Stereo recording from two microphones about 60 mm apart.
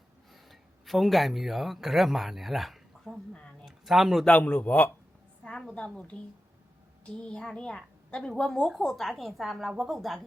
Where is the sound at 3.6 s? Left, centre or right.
Centre.